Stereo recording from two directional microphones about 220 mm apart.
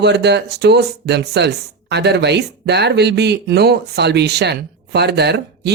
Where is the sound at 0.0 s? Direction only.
50° right (ahead or behind).